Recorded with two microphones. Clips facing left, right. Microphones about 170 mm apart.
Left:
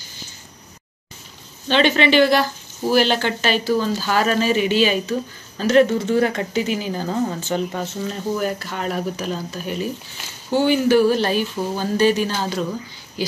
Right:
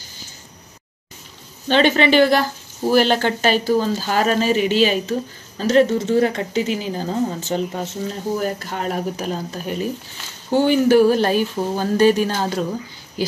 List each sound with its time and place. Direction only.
1.7 s speech: 45° right (ahead or behind)